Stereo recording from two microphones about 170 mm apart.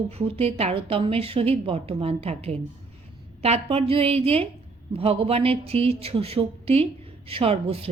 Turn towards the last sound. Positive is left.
turn(degrees=-35)  # may be behind; listen again after turning